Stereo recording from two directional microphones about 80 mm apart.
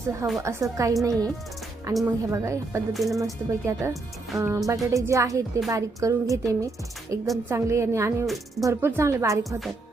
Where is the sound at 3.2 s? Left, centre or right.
Right.